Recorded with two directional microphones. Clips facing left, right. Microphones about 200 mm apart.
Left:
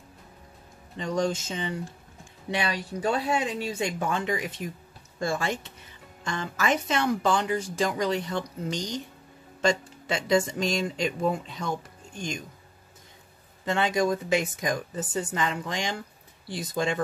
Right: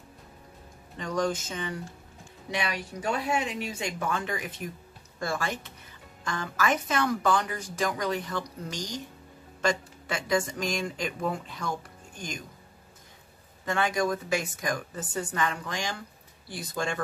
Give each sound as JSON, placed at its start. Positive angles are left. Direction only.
{"t": 0.9, "sound": "speech", "side_deg": 25}
{"t": 13.7, "sound": "speech", "side_deg": 20}